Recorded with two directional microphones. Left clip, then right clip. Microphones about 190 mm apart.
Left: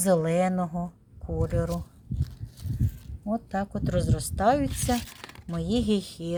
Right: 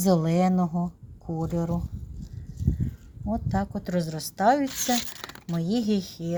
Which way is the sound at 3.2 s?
5° left (ahead or behind).